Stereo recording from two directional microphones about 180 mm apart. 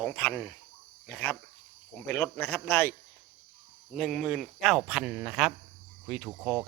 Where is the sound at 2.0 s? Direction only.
15° left (ahead or behind).